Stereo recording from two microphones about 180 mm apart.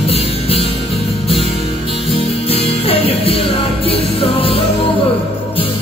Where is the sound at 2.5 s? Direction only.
30° left (ahead or behind).